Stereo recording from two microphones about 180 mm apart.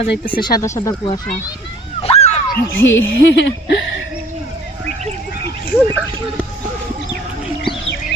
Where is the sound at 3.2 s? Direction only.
75° left (ahead or behind).